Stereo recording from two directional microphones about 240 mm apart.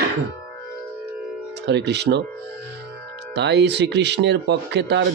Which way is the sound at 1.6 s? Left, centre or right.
Right.